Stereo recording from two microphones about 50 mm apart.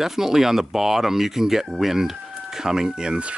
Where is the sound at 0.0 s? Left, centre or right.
Centre.